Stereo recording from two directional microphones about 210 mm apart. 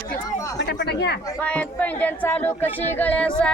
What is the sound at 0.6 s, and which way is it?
Speech, 55° left (ahead or behind).